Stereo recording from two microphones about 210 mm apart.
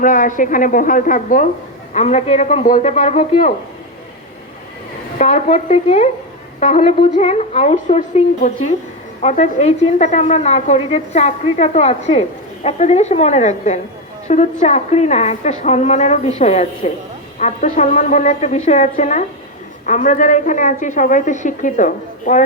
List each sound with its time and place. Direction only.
0.0 s a woman's voice: 40° left (ahead or behind)
5.1 s a woman's voice: 35° left (ahead or behind)